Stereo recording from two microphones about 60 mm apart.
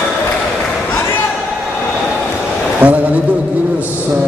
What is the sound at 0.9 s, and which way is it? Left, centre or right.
Basketball bounce, left.